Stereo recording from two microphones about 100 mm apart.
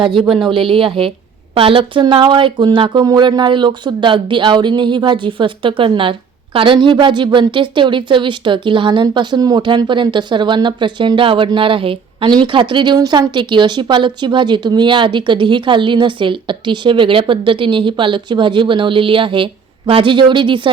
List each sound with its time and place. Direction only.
0.0 s speech: 55° right (ahead or behind)
0.3 s speech: centre (ahead or behind)
0.5 s speech: 65° right (ahead or behind)
12.3 s speech: 50° right (ahead or behind)